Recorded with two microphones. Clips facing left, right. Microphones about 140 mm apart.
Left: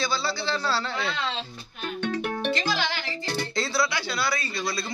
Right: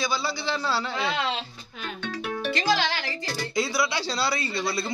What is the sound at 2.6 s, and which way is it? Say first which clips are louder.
Music: right 3 dB; 90° right.